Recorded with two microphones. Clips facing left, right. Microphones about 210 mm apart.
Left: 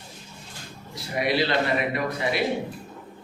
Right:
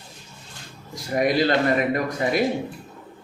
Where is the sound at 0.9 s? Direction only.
45° right (ahead or behind).